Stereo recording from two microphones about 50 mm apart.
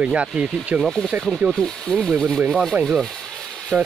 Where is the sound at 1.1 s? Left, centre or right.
Right.